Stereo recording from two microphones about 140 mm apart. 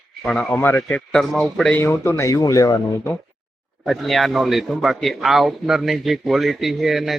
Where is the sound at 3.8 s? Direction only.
Centre (ahead or behind).